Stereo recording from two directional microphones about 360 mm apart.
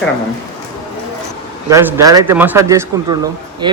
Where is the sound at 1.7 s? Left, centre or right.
Centre.